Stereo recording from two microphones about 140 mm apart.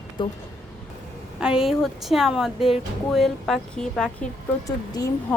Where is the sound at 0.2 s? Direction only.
35° left (ahead or behind).